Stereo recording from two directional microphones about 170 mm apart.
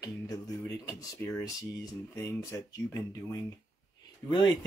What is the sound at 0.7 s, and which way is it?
Speech, 15° left (ahead or behind).